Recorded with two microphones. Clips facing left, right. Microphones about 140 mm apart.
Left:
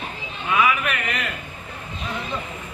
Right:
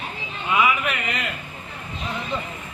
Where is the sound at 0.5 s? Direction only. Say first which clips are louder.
Even; 20° right (ahead or behind).